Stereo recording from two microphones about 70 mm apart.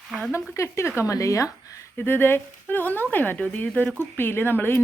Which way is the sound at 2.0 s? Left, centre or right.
Left.